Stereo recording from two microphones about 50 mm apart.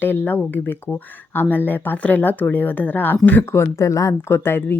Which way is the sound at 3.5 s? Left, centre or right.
Left.